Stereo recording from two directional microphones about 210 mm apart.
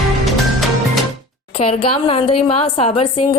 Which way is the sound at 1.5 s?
30° left (ahead or behind).